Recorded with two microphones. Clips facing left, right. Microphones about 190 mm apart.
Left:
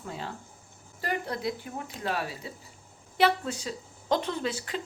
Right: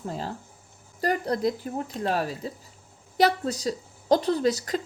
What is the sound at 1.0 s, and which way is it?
Speech, 40° right (ahead or behind).